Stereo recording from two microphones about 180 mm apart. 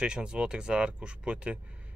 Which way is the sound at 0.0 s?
5° right (ahead or behind).